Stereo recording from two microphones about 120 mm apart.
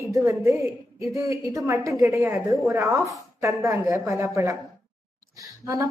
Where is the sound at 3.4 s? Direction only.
25° right (ahead or behind).